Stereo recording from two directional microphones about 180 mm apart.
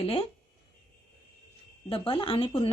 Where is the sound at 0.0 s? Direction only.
30° left (ahead or behind).